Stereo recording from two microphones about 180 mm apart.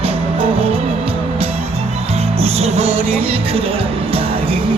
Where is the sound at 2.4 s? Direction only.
35° right (ahead or behind).